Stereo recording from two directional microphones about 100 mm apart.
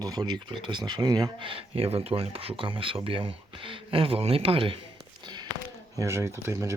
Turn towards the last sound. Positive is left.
turn(degrees=-30)  # may be behind; listen again after turning